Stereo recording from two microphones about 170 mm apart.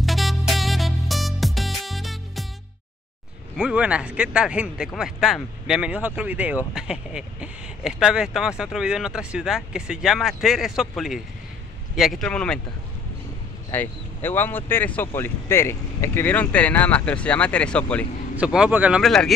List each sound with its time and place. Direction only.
0.0 s music: centre (ahead or behind)
3.5 s speech: 5° right (ahead or behind)
13.7 s speech: 10° left (ahead or behind)
18.3 s speech: 5° right (ahead or behind)